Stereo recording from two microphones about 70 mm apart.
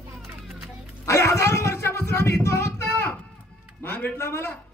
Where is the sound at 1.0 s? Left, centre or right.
Left.